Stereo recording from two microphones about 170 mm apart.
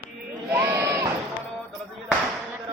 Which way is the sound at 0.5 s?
15° right (ahead or behind).